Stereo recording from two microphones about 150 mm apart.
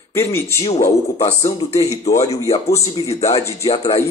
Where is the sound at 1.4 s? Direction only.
20° left (ahead or behind).